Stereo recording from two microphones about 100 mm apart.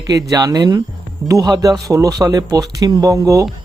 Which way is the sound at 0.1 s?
35° right (ahead or behind).